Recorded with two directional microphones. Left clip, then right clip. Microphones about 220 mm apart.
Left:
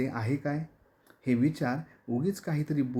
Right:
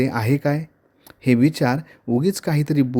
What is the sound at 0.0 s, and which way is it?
Speech, 40° right (ahead or behind).